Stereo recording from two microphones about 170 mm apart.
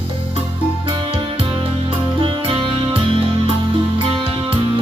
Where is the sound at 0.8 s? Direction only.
30° right (ahead or behind).